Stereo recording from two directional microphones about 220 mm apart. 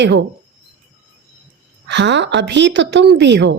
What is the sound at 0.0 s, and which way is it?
Speech, 50° right (ahead or behind).